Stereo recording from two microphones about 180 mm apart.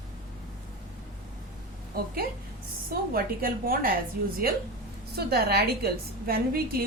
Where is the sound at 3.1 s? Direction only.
55° right (ahead or behind).